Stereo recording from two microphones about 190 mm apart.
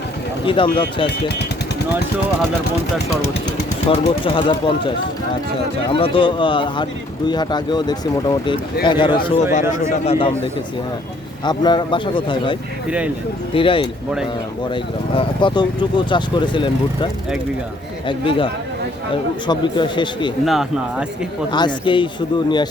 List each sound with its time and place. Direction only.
0.4 s speech: 25° left (ahead or behind)
3.8 s speech: 30° left (ahead or behind)
5.9 s speech: 25° left (ahead or behind)
11.4 s speech: 20° left (ahead or behind)
18.1 s speech: 25° left (ahead or behind)
20.4 s speech: centre (ahead or behind)
21.5 s speech: 25° left (ahead or behind)